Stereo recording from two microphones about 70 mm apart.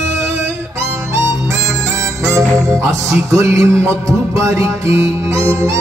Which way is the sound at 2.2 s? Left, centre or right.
Right.